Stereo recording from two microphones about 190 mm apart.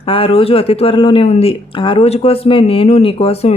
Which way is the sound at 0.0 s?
30° left (ahead or behind).